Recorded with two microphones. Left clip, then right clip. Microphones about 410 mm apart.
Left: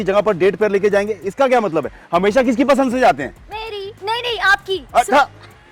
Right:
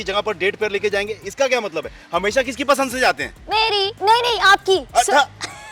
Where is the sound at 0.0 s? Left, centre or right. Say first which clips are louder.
Left 6 dB; left.